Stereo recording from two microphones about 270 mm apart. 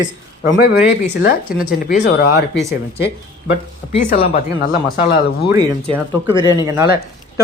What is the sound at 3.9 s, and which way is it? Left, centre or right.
Speech, left.